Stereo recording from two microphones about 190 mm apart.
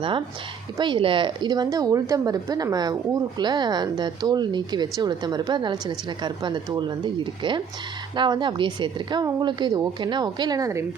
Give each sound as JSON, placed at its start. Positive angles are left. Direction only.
{"t": 0.8, "sound": "speech", "side_deg": -25}